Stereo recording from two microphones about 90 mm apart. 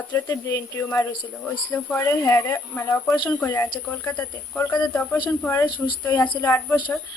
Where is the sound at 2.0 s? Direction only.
30° left (ahead or behind).